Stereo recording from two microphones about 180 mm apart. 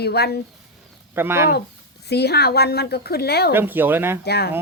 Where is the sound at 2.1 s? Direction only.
65° left (ahead or behind).